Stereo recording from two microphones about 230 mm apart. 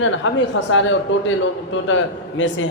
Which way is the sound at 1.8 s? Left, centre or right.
Left.